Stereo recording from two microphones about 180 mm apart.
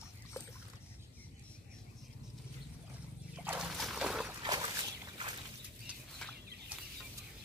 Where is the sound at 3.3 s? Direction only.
10° right (ahead or behind).